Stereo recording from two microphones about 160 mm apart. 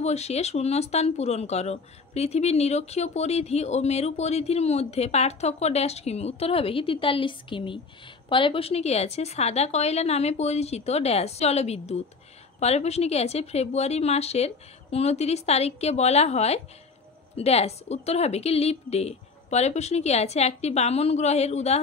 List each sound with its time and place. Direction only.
0.0 s speech: 45° left (ahead or behind)